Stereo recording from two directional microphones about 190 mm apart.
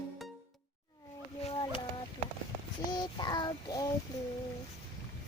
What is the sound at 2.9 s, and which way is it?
Child singing, 20° left (ahead or behind).